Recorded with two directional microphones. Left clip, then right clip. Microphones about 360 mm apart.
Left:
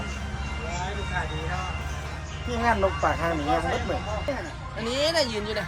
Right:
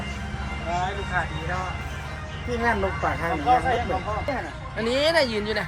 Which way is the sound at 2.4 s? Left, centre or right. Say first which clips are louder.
Left 1 dB; centre.